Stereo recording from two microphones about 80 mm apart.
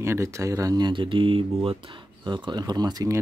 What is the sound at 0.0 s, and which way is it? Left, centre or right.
Speech, right.